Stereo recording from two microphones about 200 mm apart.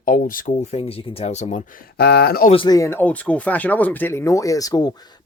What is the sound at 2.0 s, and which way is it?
Speech, 55° left (ahead or behind).